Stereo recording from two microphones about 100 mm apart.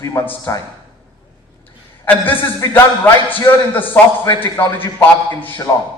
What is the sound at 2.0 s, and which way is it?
Speech, 20° left (ahead or behind).